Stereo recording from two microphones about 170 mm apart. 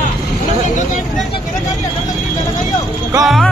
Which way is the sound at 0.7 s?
45° left (ahead or behind).